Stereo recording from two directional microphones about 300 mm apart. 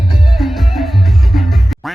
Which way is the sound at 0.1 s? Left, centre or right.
Centre.